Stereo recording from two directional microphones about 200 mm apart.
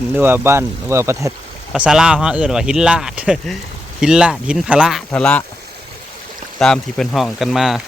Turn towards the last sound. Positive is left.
turn(degrees=0)  # may be behind; listen again after turning